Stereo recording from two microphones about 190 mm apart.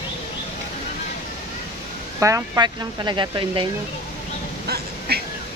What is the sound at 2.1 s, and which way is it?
Speech, 15° right (ahead or behind).